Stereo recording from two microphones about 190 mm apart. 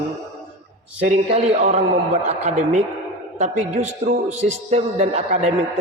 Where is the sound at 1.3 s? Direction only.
40° right (ahead or behind).